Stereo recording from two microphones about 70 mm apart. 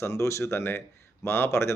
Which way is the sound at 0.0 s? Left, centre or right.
Left.